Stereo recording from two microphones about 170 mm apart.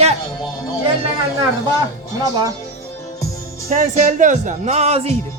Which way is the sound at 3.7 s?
50° right (ahead or behind).